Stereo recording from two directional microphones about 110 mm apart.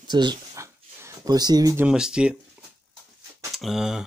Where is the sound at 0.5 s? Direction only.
25° right (ahead or behind).